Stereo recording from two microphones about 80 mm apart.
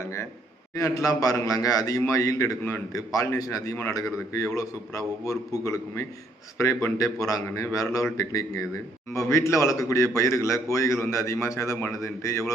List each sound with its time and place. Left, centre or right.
0.8 s a man's voice: left